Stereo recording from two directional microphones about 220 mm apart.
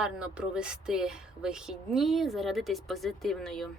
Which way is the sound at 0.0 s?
5° right (ahead or behind).